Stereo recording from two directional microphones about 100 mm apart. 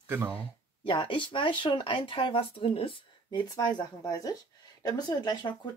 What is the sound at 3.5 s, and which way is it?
Speech, 40° left (ahead or behind).